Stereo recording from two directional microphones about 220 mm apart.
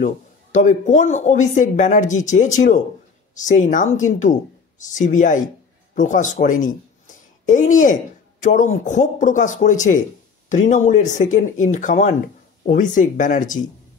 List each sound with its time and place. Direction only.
0.0 s speech: 35° left (ahead or behind)